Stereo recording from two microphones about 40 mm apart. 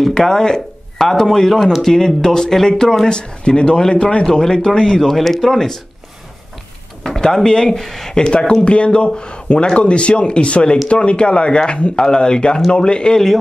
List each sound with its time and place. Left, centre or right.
0.1 s speech: centre
1.6 s speech: centre
1.9 s speech: centre
3.2 s speech: left; by 5.8 s centre
7.0 s speech: centre
8.2 s speech: left